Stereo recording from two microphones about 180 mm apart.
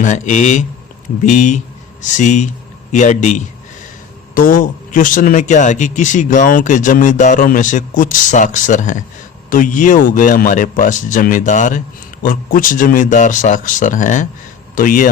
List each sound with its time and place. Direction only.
0.0 s a man's voice: 40° left (ahead or behind)